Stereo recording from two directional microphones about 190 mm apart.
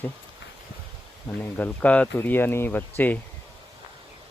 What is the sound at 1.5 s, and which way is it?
Speech, 10° left (ahead or behind).